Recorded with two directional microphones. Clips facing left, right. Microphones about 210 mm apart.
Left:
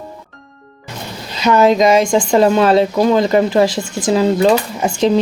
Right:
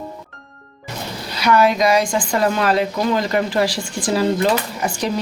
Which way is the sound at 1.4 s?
25° left (ahead or behind).